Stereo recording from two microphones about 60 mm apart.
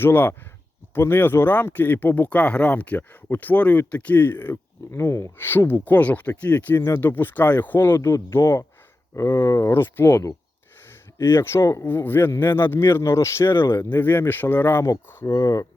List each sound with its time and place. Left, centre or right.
0.0 s speech: left
4.9 s speech: left
6.7 s speech: left
7.0 s speech: left
11.3 s speech: left
13.0 s speech: left
15.3 s speech: left